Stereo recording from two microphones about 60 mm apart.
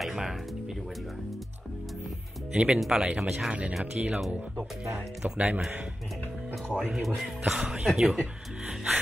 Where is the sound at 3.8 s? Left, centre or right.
Right.